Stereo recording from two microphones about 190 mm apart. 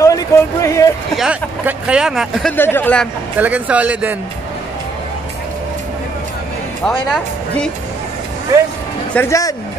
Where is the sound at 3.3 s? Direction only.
10° right (ahead or behind).